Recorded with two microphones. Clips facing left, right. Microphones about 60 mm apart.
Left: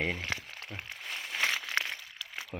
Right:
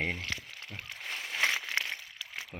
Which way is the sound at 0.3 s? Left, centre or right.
Left.